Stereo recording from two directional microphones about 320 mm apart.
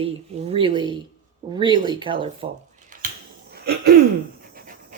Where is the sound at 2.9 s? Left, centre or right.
Right.